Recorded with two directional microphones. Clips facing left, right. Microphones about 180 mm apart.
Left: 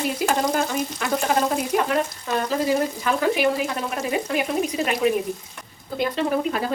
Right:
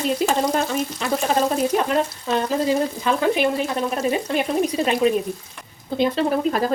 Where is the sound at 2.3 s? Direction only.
20° right (ahead or behind).